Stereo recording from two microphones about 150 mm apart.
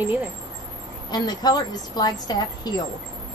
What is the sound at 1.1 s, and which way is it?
Speech, 30° left (ahead or behind).